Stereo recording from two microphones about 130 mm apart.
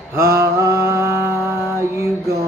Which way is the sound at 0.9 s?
20° right (ahead or behind).